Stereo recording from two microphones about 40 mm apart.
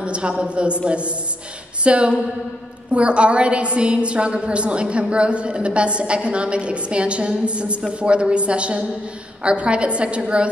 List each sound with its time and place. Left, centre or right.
0.0 s a woman's voice: right